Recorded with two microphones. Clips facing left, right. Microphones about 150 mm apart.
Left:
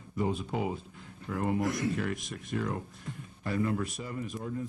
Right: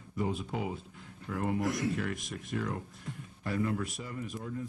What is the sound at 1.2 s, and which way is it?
Speech, 35° left (ahead or behind).